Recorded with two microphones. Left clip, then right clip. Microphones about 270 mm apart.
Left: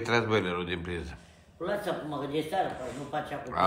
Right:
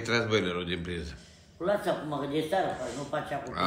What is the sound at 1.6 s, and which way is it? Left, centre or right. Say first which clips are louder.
Speech: right 4 dB; centre.